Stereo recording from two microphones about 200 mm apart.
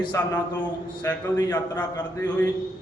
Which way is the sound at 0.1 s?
15° left (ahead or behind).